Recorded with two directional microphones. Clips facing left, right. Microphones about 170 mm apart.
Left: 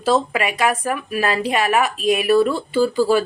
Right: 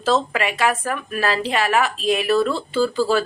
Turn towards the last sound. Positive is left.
turn(degrees=15)  # may be behind; listen again after turning